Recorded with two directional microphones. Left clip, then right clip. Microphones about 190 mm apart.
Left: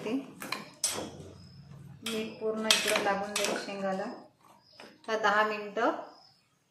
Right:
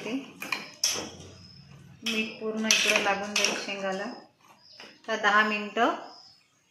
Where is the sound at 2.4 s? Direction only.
10° right (ahead or behind).